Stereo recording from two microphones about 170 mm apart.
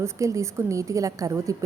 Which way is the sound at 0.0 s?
15° right (ahead or behind).